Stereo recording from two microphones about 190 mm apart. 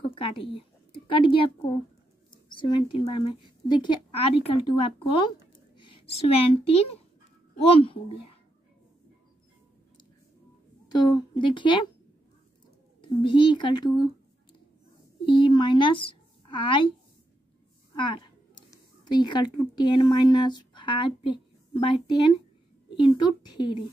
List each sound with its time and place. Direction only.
0.1 s a woman's voice: 30° left (ahead or behind)
10.9 s a woman's voice: 20° left (ahead or behind)
13.2 s a woman's voice: 25° left (ahead or behind)
15.2 s a child's voice: 25° left (ahead or behind)
17.9 s a woman's voice: 25° left (ahead or behind)